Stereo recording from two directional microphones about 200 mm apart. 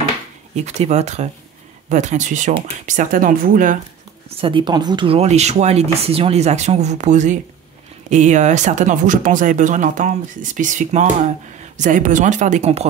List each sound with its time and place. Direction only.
0.6 s speech: 35° right (ahead or behind)
4.3 s speech: 25° right (ahead or behind)